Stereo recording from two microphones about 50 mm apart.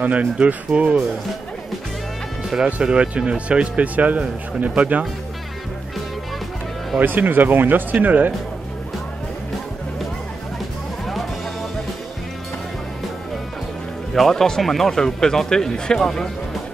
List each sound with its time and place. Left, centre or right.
0.0 s speech: right
2.5 s speech: centre
7.0 s speech: right
14.1 s speech: centre